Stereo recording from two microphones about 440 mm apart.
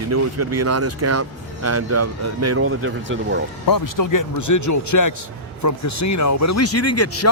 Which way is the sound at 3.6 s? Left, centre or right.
Left.